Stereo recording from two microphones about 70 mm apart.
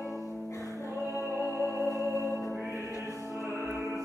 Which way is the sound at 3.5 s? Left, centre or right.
Right.